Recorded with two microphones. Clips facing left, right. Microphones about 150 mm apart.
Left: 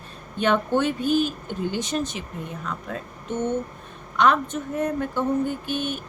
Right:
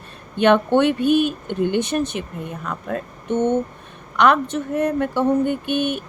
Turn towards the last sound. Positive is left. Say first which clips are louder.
# right 6 dB
turn(degrees=-65)  # may be behind; listen again after turning